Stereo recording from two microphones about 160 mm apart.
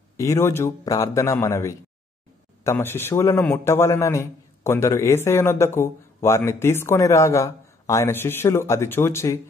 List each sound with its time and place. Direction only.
0.2 s a man's voice: 15° left (ahead or behind)